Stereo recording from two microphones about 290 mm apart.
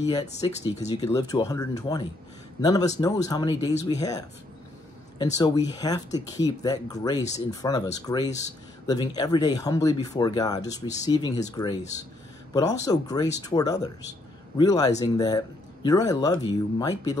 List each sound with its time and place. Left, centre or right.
0.1 s speech: centre
1.0 s speech: centre
5.2 s speech: centre